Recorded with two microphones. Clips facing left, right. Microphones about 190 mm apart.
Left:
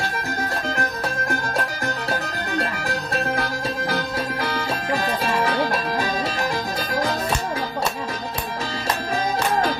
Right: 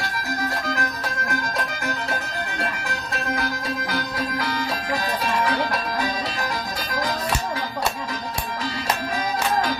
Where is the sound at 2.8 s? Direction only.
35° left (ahead or behind).